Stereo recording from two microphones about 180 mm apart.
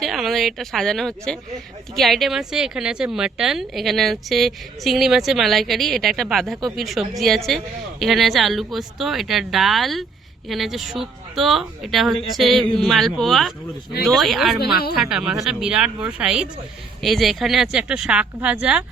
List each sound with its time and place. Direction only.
0.0 s a woman's voice: centre (ahead or behind)
14.6 s a woman's voice: 60° left (ahead or behind)
14.9 s a woman's voice: 5° right (ahead or behind)